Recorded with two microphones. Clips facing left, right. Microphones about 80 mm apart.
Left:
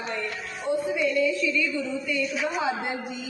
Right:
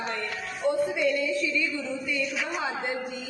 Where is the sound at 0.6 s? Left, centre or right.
Right.